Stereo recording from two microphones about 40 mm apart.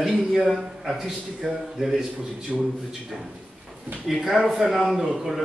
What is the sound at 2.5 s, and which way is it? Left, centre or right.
Speech, centre.